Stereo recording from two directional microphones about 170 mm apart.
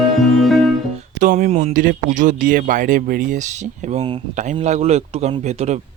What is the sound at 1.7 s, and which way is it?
Speech, 55° right (ahead or behind).